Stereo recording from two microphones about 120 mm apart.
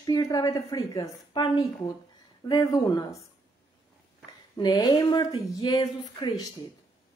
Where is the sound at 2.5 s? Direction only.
30° left (ahead or behind).